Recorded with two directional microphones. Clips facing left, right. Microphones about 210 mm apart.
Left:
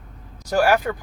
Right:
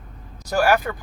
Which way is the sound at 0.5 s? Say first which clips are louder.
Left 1 dB; 25° left (ahead or behind).